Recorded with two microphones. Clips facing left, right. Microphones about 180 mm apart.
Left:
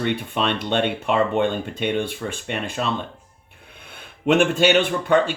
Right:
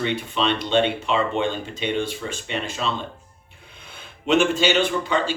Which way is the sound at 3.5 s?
55° left (ahead or behind).